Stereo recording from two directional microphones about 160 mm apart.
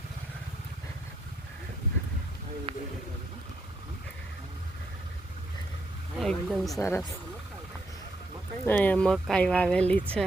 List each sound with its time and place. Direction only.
2.7 s speech: 35° right (ahead or behind)
6.1 s speech: centre (ahead or behind)
6.7 s speech: 15° left (ahead or behind)
8.6 s speech: 10° left (ahead or behind)